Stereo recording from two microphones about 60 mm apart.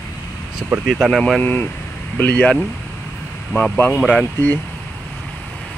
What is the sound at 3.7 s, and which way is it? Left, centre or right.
Speech, left.